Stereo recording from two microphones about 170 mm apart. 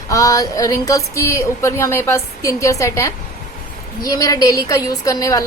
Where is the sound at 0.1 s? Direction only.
20° left (ahead or behind).